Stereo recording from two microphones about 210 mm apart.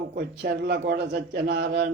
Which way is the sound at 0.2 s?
50° right (ahead or behind).